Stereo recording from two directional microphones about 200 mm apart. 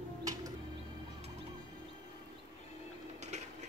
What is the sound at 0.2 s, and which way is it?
Music, 20° right (ahead or behind).